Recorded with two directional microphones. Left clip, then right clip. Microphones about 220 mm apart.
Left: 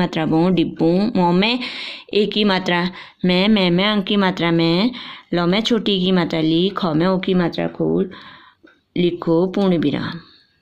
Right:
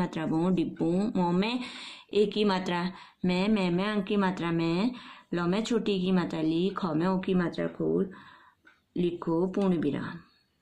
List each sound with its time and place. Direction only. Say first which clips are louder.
0.0 s speech: left 12 dB; 35° left (ahead or behind)